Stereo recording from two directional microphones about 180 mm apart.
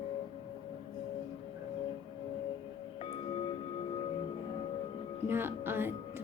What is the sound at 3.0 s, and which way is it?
Music, 30° left (ahead or behind).